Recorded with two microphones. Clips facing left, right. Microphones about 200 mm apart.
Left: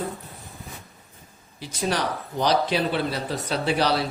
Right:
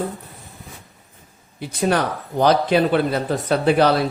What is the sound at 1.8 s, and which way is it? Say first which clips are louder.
Speech: right 6 dB; 55° right (ahead or behind).